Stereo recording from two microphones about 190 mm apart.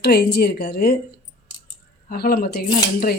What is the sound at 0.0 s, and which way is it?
Speech, 60° left (ahead or behind).